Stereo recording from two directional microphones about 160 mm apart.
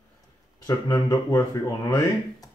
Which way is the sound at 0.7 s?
20° left (ahead or behind).